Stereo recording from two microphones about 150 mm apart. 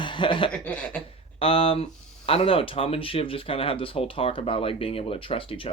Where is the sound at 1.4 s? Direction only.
40° left (ahead or behind).